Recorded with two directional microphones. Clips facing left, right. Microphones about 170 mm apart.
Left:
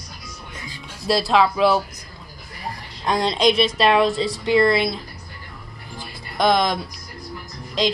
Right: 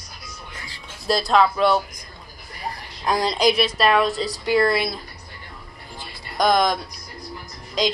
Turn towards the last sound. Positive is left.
turn(degrees=0)  # may be behind; listen again after turning